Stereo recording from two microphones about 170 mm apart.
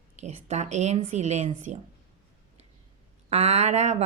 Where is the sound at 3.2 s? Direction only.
40° right (ahead or behind).